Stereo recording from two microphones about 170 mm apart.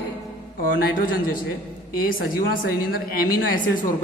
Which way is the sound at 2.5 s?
60° left (ahead or behind).